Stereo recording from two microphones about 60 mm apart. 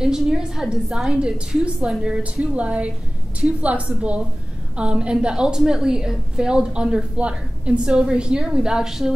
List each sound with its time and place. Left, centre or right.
0.0 s a woman's voice: centre